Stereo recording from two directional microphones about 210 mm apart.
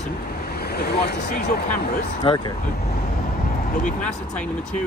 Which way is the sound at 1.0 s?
45° left (ahead or behind).